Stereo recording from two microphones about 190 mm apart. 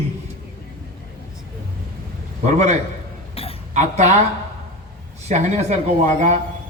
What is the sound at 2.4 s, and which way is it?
Speech, 40° right (ahead or behind).